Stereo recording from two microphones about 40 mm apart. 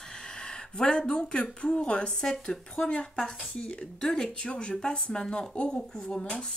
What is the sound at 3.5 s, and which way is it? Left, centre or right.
A woman's voice, left.